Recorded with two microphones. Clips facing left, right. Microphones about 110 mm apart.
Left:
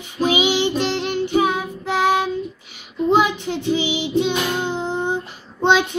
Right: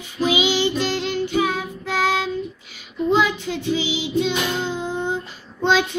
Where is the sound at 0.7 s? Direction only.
55° left (ahead or behind).